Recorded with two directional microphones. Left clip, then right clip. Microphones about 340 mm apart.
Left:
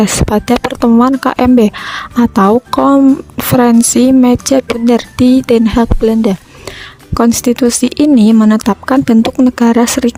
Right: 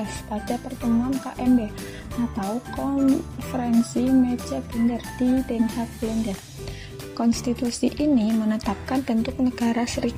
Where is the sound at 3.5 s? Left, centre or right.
Left.